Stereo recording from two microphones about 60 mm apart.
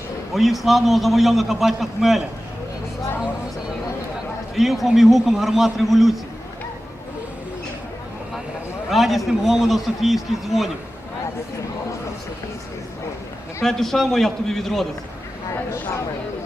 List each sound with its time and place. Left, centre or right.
0.3 s a man's voice: centre
4.5 s a man's voice: centre
8.9 s a man's voice: centre
13.6 s a man's voice: centre